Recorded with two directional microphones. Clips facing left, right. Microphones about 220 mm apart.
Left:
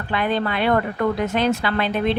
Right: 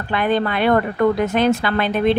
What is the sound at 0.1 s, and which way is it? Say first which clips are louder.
A woman's voice: right 3 dB; 50° right (ahead or behind).